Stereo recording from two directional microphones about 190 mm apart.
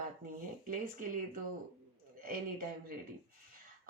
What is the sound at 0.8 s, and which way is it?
A woman's voice, 45° right (ahead or behind).